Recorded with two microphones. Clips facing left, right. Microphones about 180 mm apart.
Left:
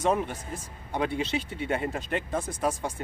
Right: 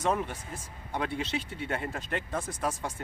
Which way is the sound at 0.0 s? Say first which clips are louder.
Left 3 dB; 15° left (ahead or behind).